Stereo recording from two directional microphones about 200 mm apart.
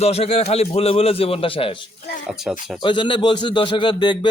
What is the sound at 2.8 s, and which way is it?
Speech, 25° left (ahead or behind).